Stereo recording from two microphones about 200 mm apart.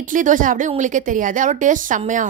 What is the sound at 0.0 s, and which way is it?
A woman's voice, 40° right (ahead or behind).